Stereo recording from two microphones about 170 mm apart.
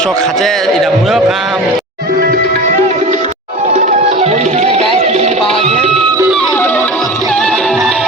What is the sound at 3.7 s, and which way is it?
Music, 45° right (ahead or behind).